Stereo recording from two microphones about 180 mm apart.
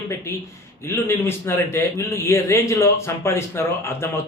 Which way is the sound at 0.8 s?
15° left (ahead or behind).